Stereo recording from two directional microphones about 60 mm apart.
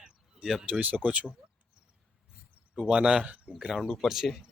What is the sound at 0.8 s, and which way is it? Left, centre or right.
Speech, right.